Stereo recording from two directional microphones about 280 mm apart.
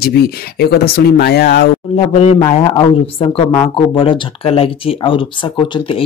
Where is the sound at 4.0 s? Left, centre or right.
Centre.